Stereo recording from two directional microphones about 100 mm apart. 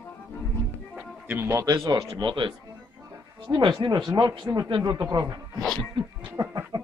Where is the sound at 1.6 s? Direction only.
35° right (ahead or behind).